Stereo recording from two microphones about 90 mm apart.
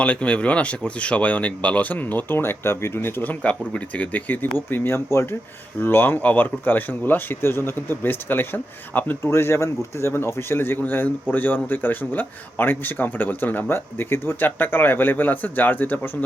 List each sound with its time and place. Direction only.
0.0 s speech: 15° left (ahead or behind)